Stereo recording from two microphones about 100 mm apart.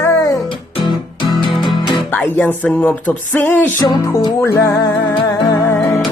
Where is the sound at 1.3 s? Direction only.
50° left (ahead or behind).